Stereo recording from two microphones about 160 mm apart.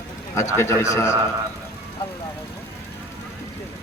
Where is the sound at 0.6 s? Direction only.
15° left (ahead or behind).